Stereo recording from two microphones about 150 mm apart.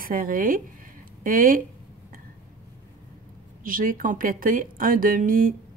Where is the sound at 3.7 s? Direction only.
65° right (ahead or behind).